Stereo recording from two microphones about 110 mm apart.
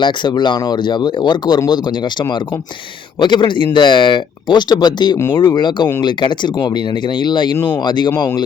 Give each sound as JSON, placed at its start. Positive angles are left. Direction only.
{"t": 0.0, "sound": "speech", "side_deg": 45}